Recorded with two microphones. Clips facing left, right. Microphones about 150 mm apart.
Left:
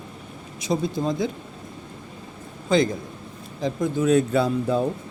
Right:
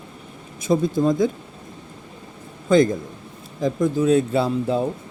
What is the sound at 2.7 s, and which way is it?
A man's voice, 50° right (ahead or behind).